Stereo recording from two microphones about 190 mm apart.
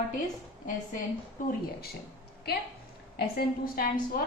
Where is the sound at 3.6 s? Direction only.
50° left (ahead or behind).